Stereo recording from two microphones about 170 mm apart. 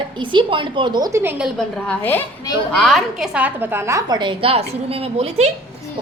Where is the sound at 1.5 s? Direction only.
10° left (ahead or behind).